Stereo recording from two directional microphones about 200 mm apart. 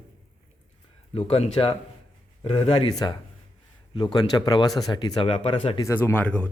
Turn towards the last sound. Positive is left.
turn(degrees=5)  # may be behind; listen again after turning